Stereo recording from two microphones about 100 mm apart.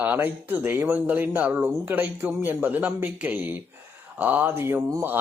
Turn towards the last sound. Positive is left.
turn(degrees=-30)  # may be behind; listen again after turning